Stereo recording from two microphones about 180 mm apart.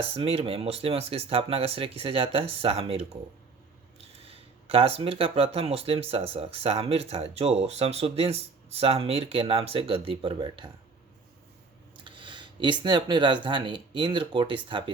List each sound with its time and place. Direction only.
0.0 s speech: 30° right (ahead or behind)
12.0 s speech: 25° right (ahead or behind)